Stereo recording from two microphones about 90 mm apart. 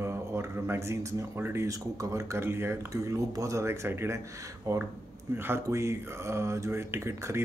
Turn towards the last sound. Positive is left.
turn(degrees=-30)  # may be behind; listen again after turning